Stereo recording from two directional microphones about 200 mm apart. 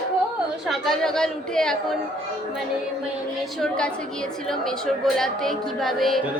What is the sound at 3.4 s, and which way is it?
A woman's voice, centre (ahead or behind).